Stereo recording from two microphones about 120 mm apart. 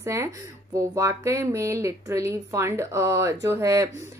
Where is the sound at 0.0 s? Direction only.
25° right (ahead or behind).